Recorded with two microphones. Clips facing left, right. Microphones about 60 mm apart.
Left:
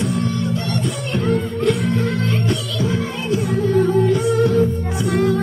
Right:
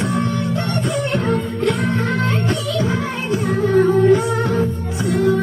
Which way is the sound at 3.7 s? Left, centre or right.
Right.